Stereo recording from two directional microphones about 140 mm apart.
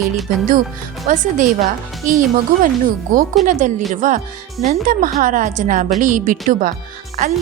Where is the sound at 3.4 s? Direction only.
65° right (ahead or behind).